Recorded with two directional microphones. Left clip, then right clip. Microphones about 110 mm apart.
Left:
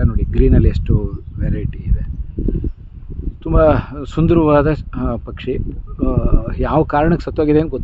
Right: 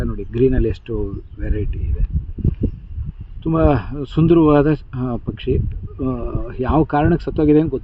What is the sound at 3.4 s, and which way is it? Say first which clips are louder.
Speech: left 4 dB; 35° left (ahead or behind).